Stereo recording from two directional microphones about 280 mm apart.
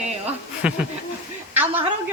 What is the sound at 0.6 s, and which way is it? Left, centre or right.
Speech, centre.